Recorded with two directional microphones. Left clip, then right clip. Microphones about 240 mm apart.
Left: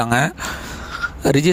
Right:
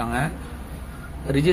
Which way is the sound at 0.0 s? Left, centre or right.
Left.